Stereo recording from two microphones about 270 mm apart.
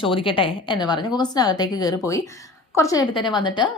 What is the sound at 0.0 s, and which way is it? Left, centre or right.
Speech, centre.